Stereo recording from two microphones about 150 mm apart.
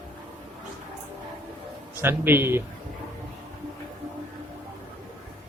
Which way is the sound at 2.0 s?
15° right (ahead or behind).